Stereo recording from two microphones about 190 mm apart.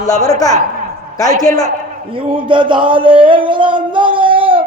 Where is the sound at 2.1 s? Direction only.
25° right (ahead or behind).